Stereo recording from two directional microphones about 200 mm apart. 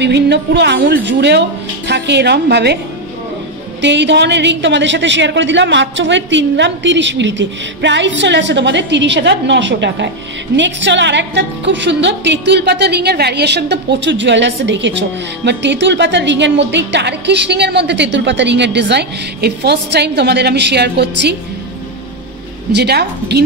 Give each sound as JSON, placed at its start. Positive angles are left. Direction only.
{"t": 0.0, "sound": "a woman's voice", "side_deg": -60}
{"t": 3.8, "sound": "a woman's voice", "side_deg": -60}
{"t": 22.7, "sound": "a woman's voice", "side_deg": -55}